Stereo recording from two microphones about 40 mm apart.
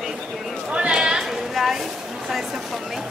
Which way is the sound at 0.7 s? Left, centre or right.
Right.